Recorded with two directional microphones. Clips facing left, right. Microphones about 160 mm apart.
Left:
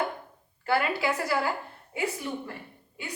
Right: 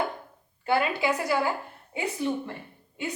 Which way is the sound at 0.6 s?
20° right (ahead or behind).